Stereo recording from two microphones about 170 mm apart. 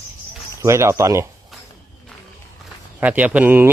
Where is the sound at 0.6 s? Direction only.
15° right (ahead or behind).